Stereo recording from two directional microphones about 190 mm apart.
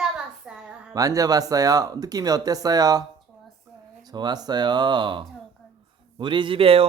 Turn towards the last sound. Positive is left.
turn(degrees=-30)  # may be behind; listen again after turning